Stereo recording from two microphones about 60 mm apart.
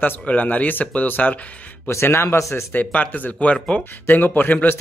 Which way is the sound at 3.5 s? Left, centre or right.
Centre.